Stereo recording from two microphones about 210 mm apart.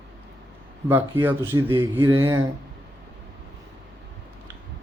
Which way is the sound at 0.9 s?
10° right (ahead or behind).